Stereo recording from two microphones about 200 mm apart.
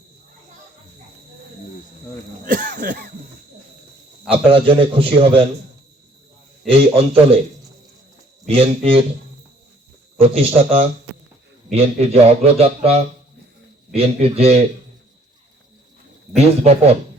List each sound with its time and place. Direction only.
2.4 s speech: 40° right (ahead or behind)
4.3 s a man's voice: 25° right (ahead or behind)
6.7 s a man's voice: 30° right (ahead or behind)
8.4 s a man's voice: 30° right (ahead or behind)
10.2 s a man's voice: 25° right (ahead or behind)
16.3 s a man's voice: 30° right (ahead or behind)